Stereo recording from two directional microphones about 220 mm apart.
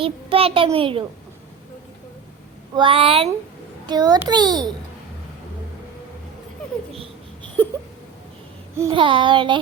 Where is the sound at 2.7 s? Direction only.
25° right (ahead or behind).